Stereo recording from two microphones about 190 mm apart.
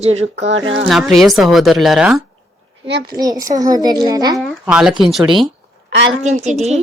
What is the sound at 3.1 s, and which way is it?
A child's voice, 20° right (ahead or behind).